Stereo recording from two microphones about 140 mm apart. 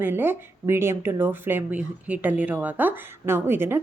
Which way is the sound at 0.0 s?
15° right (ahead or behind).